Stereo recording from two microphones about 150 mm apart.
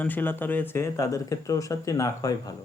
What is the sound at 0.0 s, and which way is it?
Speech, 10° left (ahead or behind).